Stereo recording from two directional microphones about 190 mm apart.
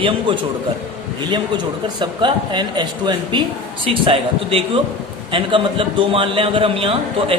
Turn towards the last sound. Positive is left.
turn(degrees=-30)  # may be behind; listen again after turning